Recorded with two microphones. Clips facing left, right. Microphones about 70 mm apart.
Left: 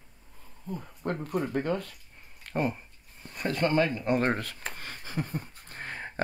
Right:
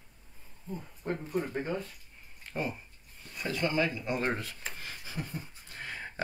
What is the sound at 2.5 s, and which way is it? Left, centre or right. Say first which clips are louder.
Speech: left 6 dB; left.